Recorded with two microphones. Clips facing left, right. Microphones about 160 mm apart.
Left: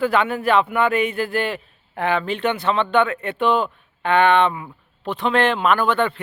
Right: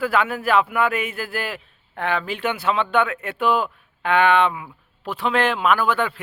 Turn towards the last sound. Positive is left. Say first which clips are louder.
# left 2 dB
turn(degrees=-5)  # may be behind; listen again after turning